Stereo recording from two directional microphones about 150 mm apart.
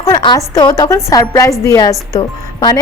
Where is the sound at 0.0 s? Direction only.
25° left (ahead or behind).